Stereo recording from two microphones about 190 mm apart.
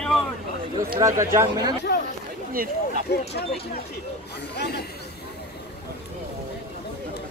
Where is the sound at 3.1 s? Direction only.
60° left (ahead or behind).